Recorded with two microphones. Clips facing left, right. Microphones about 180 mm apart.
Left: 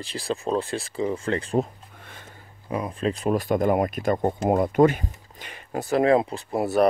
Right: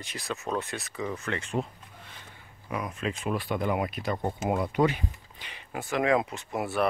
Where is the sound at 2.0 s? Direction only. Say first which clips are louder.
Left 4 dB; 50° left (ahead or behind).